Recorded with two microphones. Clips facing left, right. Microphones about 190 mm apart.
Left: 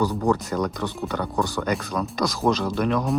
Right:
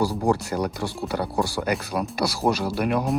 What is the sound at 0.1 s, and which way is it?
Speech, 35° right (ahead or behind).